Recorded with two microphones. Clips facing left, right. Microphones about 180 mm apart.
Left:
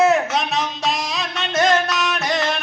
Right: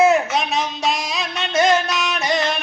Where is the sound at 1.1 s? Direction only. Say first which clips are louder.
Right 1 dB; centre (ahead or behind).